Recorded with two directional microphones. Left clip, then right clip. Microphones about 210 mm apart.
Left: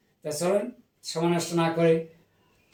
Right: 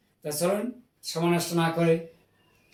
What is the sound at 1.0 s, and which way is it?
Speech, centre (ahead or behind).